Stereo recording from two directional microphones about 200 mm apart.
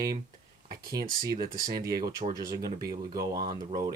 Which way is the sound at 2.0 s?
45° right (ahead or behind).